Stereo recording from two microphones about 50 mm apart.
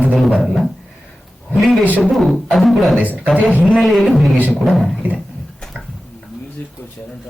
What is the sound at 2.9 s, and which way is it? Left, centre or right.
Speech, right.